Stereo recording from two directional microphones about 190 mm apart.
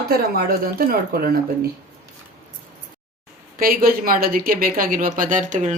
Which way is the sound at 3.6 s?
50° right (ahead or behind).